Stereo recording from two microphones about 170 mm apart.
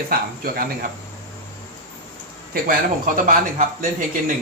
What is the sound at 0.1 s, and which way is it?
Speech, 60° right (ahead or behind).